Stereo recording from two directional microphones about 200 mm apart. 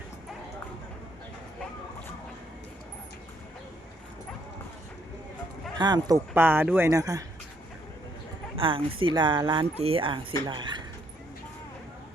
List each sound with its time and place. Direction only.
5.7 s speech: 20° right (ahead or behind)
8.5 s speech: 25° right (ahead or behind)